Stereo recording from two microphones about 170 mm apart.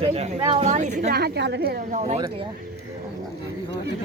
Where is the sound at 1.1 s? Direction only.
70° right (ahead or behind).